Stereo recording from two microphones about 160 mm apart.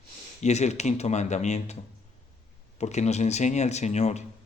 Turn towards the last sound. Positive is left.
turn(degrees=45)  # may be behind; listen again after turning